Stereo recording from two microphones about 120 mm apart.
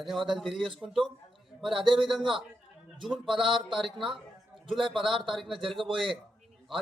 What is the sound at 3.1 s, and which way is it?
Speech, 5° right (ahead or behind).